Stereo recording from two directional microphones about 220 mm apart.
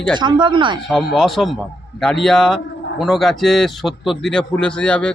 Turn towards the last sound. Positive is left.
turn(degrees=5)  # may be behind; listen again after turning